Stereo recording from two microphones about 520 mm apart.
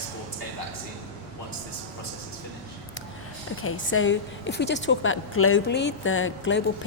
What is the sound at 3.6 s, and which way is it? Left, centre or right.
A woman's voice, left.